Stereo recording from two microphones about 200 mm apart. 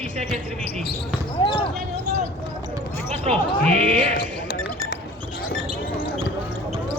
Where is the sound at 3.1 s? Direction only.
30° right (ahead or behind).